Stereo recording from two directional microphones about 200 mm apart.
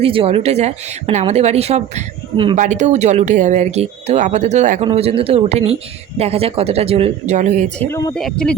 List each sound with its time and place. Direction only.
0.0 s speech: 25° right (ahead or behind)
2.6 s speech: 40° right (ahead or behind)
7.8 s speech: 15° left (ahead or behind)